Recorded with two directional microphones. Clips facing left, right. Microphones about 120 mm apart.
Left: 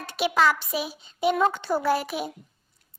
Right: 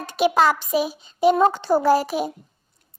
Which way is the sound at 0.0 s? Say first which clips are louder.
Right 4 dB; 45° right (ahead or behind).